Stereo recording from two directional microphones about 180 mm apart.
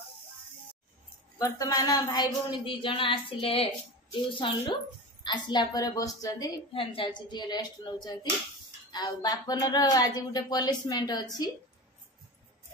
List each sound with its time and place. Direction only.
1.4 s speech: 20° left (ahead or behind)